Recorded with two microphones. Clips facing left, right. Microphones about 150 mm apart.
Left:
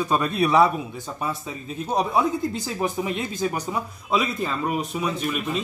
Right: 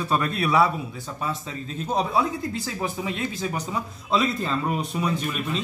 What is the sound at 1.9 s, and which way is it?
Speech, 15° left (ahead or behind).